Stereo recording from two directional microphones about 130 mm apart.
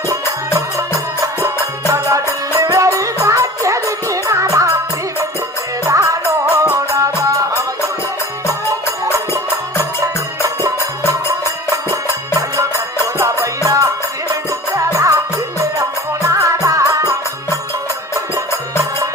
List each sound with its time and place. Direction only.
1.9 s music: 25° right (ahead or behind)
5.8 s music: 25° right (ahead or behind)
13.1 s music: 20° right (ahead or behind)
16.2 s music: 25° right (ahead or behind)